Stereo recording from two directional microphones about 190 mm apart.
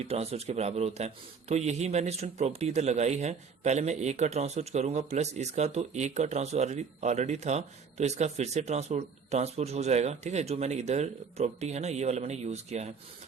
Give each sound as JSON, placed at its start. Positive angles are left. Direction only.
{"t": 0.0, "sound": "a man's voice", "side_deg": -35}